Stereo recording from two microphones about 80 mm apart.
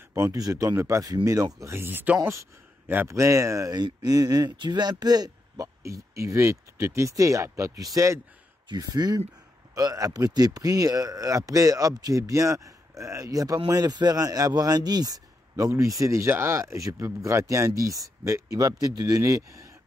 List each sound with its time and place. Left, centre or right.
0.1 s speech: right
3.1 s speech: right
4.6 s speech: right
6.1 s speech: right
8.6 s speech: right